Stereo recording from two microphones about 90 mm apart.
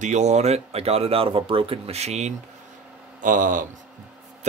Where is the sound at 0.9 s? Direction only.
90° right.